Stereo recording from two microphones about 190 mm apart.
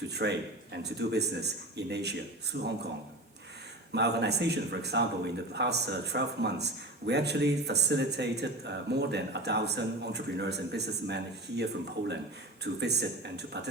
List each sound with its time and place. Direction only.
0.1 s a man's voice: 65° right (ahead or behind)
3.9 s a man's voice: 60° right (ahead or behind)